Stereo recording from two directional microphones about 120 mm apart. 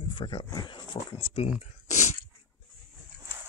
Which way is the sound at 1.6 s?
75° left (ahead or behind).